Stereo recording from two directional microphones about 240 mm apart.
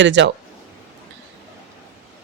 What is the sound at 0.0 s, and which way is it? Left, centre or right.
Speech, right.